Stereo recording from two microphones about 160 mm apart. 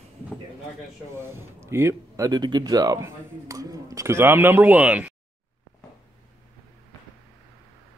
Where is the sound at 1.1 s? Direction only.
15° right (ahead or behind).